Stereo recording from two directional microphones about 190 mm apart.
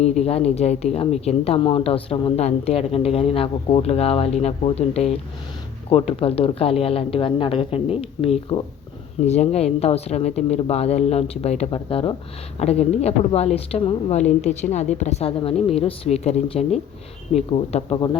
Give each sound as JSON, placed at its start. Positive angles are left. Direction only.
{"t": 0.0, "sound": "speech", "side_deg": 35}